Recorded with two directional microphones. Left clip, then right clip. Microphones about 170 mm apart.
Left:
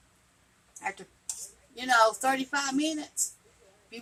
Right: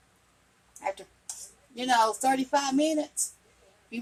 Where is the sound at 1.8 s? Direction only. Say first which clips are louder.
Left 1 dB; 25° right (ahead or behind).